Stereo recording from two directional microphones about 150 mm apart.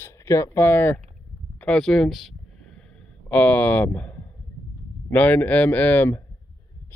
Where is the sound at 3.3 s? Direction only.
10° left (ahead or behind).